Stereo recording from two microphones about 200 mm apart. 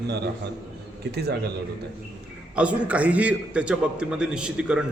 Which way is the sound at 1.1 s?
55° right (ahead or behind).